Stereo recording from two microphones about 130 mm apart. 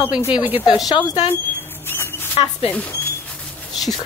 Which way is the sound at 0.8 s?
30° left (ahead or behind).